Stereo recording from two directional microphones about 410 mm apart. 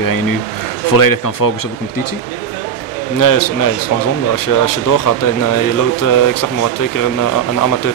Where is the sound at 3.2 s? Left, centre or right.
Left.